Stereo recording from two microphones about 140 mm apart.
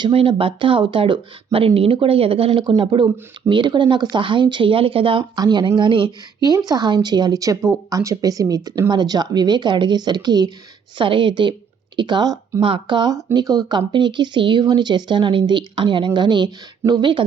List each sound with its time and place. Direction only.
0.0 s a woman's voice: 40° right (ahead or behind)